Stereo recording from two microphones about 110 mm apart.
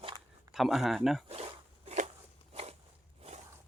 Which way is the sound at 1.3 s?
70° right (ahead or behind).